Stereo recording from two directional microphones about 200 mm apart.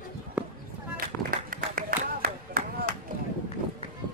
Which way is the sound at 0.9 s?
45° right (ahead or behind).